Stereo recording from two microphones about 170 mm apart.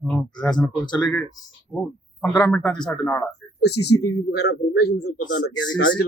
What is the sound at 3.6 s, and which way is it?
A man's voice, 75° left (ahead or behind).